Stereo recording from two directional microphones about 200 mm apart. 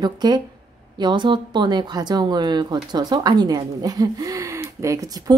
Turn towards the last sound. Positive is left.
turn(degrees=-15)  # may be behind; listen again after turning